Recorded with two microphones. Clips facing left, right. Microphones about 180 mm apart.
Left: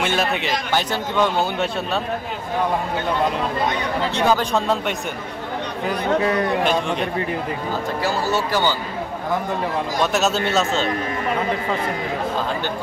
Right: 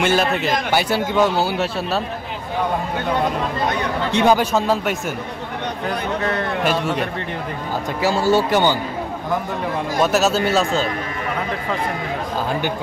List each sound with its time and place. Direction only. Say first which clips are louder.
0.0 s a man's voice: right 3 dB; centre (ahead or behind)
4.1 s a man's voice: right 4 dB; 15° right (ahead or behind)
4.6 s speech: right 2 dB; centre (ahead or behind)
5.9 s a man's voice: left 4 dB; 10° left (ahead or behind)
6.6 s speech: even; 5° right (ahead or behind)
8.0 s a man's voice: right 7 dB; 15° right (ahead or behind)
9.9 s speech: right 4 dB; centre (ahead or behind)